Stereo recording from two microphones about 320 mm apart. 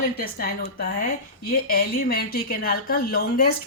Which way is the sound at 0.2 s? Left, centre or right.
Left.